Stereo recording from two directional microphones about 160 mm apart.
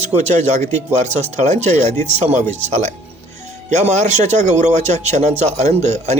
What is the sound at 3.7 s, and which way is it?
Speech, 45° right (ahead or behind).